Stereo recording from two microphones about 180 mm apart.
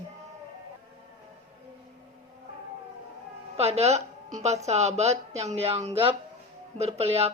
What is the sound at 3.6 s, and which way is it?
A woman's voice, 35° right (ahead or behind).